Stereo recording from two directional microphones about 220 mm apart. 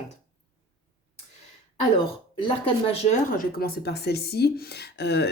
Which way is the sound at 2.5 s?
25° left (ahead or behind).